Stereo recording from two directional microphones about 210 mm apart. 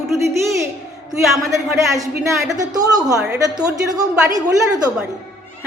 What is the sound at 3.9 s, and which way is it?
Speech, 15° right (ahead or behind).